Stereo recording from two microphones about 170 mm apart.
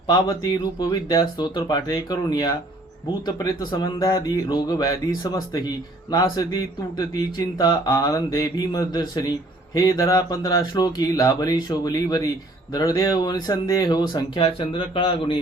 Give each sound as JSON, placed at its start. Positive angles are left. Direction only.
{"t": 0.1, "sound": "speech", "side_deg": 25}